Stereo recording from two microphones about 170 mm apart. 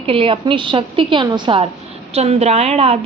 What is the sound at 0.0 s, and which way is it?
A woman's voice, 35° right (ahead or behind).